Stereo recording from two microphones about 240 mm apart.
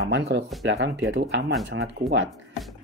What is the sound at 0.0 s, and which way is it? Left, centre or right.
Speech, right.